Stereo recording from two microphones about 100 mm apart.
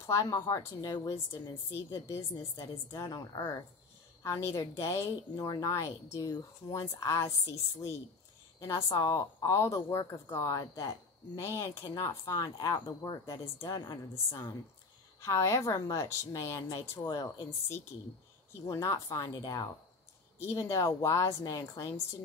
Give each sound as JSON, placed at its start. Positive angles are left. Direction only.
{"t": 0.0, "sound": "a woman's voice", "side_deg": 30}
{"t": 12.4, "sound": "a woman's voice", "side_deg": 40}
{"t": 20.3, "sound": "speech", "side_deg": 25}